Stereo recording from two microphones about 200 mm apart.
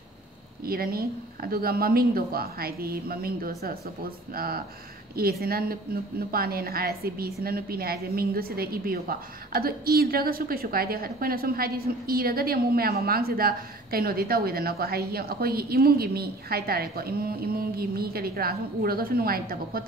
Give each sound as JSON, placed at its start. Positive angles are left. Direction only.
{"t": 0.7, "sound": "a woman's voice", "side_deg": -50}